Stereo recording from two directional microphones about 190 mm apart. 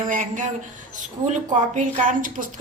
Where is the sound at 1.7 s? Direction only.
40° right (ahead or behind).